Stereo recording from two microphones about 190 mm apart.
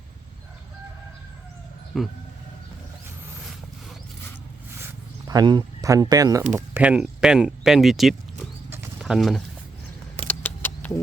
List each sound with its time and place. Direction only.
1.9 s speech: centre (ahead or behind)
5.3 s speech: 20° right (ahead or behind)
6.6 s speech: 10° right (ahead or behind)
10.2 s a sound: 10° left (ahead or behind)